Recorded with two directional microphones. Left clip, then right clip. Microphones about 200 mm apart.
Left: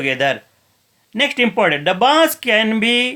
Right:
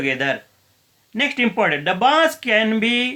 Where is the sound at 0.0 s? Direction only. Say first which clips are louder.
Left 3 dB; 40° left (ahead or behind).